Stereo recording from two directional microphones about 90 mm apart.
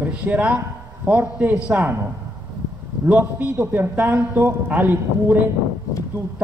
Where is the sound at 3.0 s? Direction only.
20° right (ahead or behind).